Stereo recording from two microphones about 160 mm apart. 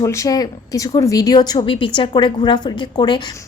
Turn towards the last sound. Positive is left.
turn(degrees=30)  # may be behind; listen again after turning